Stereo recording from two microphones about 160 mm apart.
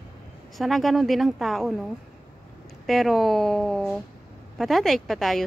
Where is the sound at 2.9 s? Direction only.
Centre (ahead or behind).